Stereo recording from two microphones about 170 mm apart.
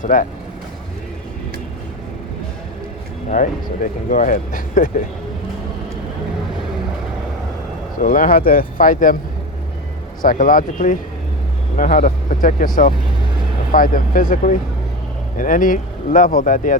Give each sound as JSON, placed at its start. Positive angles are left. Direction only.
{"t": 0.0, "sound": "speech", "side_deg": 50}
{"t": 3.2, "sound": "speech", "side_deg": 50}
{"t": 8.0, "sound": "speech", "side_deg": 50}
{"t": 10.2, "sound": "speech", "side_deg": 50}